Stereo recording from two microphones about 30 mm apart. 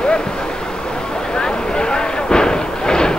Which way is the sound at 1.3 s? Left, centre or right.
Left.